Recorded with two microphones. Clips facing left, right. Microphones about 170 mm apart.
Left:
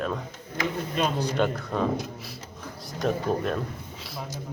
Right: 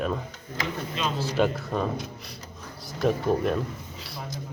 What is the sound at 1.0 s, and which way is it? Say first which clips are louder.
Speech: left 4 dB; 50° left (ahead or behind).